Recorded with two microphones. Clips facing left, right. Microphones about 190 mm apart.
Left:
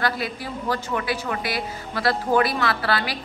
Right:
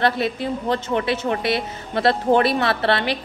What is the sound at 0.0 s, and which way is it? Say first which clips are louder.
Speech: right 6 dB; 25° right (ahead or behind).